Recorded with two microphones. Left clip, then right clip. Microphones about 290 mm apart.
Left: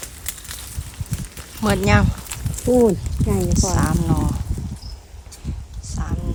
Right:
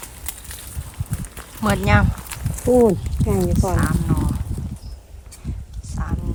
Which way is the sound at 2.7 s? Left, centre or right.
Right.